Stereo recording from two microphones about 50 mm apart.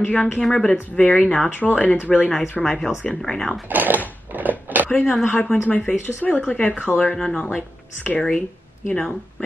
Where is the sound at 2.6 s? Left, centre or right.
Centre.